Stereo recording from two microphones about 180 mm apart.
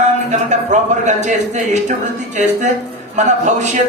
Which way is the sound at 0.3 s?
40° right (ahead or behind).